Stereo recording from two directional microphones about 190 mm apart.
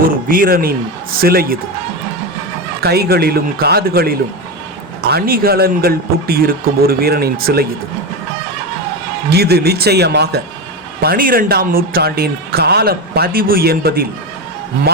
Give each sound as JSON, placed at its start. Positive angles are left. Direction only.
{"t": 0.3, "sound": "speech", "side_deg": -50}
{"t": 2.8, "sound": "speech", "side_deg": -55}
{"t": 5.1, "sound": "speech", "side_deg": -50}
{"t": 9.3, "sound": "a man's voice", "side_deg": -55}